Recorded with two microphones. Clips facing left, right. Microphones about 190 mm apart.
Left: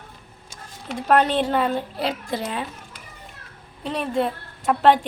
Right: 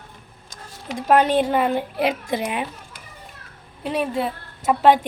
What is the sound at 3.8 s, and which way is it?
Speech, 10° right (ahead or behind).